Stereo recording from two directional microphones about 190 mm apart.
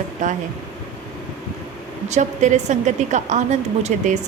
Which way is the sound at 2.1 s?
40° right (ahead or behind).